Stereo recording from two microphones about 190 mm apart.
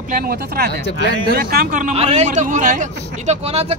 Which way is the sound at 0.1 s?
50° right (ahead or behind).